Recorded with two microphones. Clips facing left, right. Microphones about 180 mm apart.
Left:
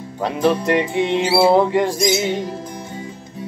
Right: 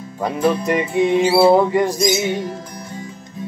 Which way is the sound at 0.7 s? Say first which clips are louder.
Right 1 dB; 5° right (ahead or behind).